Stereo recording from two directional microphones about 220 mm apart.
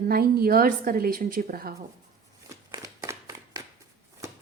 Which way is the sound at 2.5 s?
15° right (ahead or behind).